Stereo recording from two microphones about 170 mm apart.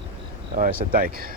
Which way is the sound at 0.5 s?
55° right (ahead or behind).